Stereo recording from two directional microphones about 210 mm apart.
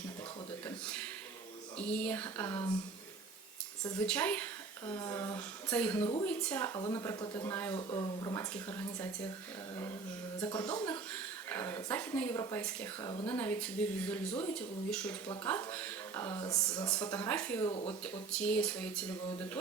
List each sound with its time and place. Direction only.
1.8 s speech: 5° left (ahead or behind)
3.9 s speech: 5° left (ahead or behind)
10.4 s speech: 20° left (ahead or behind)
17.7 s speech: 25° left (ahead or behind)
18.0 s speech: 5° left (ahead or behind)